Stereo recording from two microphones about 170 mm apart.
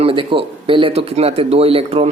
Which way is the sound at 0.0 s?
30° right (ahead or behind).